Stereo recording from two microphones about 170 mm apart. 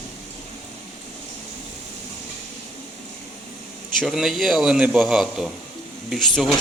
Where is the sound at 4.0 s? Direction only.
Centre (ahead or behind).